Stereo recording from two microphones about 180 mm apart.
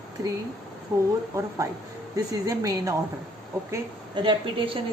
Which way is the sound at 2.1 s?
20° right (ahead or behind).